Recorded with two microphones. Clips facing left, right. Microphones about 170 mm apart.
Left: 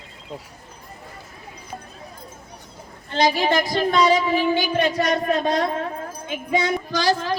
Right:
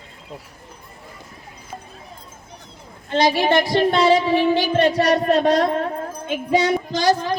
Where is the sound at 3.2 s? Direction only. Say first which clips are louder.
Right 2 dB; 30° right (ahead or behind).